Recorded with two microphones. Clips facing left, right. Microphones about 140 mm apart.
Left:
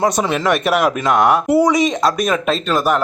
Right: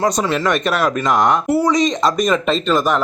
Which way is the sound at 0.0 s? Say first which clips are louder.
Left 1 dB; 10° left (ahead or behind).